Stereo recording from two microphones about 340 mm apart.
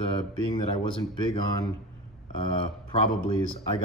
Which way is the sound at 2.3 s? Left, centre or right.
Centre.